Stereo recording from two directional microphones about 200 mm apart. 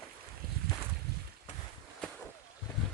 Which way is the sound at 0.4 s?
50° right (ahead or behind).